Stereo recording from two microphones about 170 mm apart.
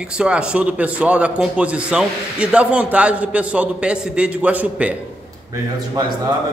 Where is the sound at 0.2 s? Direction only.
5° right (ahead or behind).